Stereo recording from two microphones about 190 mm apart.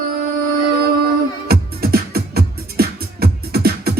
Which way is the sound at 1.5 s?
55° right (ahead or behind).